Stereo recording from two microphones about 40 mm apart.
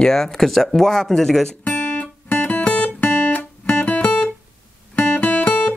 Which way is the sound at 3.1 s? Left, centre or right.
Left.